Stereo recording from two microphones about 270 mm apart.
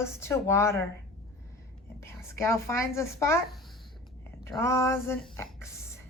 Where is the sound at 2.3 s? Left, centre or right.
Centre.